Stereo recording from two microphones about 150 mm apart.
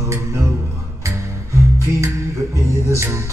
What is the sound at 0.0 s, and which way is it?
Music, 20° right (ahead or behind).